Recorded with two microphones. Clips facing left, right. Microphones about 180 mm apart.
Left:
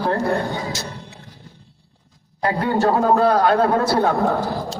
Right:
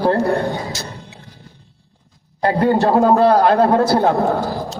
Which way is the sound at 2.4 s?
35° right (ahead or behind).